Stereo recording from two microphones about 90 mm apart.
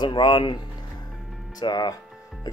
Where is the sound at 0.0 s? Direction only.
65° left (ahead or behind).